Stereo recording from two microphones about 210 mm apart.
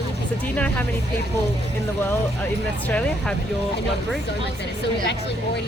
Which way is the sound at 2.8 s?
5° left (ahead or behind).